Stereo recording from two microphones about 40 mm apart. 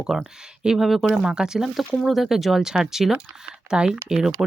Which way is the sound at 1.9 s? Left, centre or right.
Centre.